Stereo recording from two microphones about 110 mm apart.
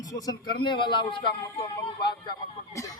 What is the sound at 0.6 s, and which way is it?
Speech, 45° left (ahead or behind).